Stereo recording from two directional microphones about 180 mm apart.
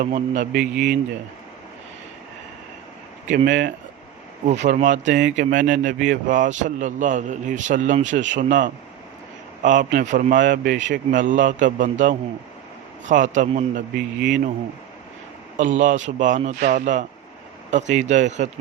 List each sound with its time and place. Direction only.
0.0 s speech: 50° right (ahead or behind)
3.2 s speech: 55° right (ahead or behind)
4.4 s speech: 40° right (ahead or behind); by 11.0 s 85° right
11.1 s speech: 45° right (ahead or behind)
13.9 s speech: 65° right (ahead or behind)
15.5 s speech: 45° right (ahead or behind)